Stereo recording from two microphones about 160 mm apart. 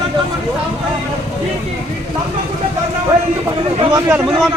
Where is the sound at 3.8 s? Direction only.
25° right (ahead or behind).